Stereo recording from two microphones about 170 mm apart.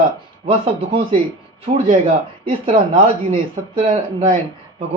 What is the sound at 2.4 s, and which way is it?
Speech, 35° right (ahead or behind).